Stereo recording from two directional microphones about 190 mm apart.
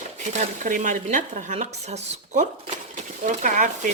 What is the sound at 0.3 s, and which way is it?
Speech, 40° right (ahead or behind).